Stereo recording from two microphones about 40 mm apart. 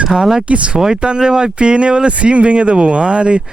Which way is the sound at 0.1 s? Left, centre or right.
Centre.